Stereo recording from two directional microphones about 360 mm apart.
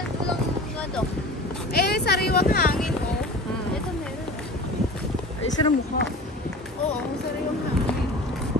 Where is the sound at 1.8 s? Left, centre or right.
Left.